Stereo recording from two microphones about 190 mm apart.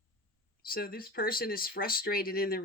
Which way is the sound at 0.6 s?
50° left (ahead or behind).